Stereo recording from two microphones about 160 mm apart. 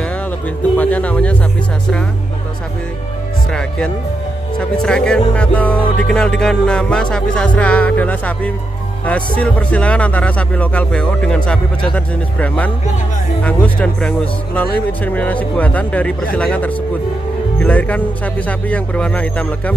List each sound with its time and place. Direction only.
0.7 s speech: 10° left (ahead or behind)
3.5 s music: 5° left (ahead or behind)
9.0 s speech: 10° left (ahead or behind)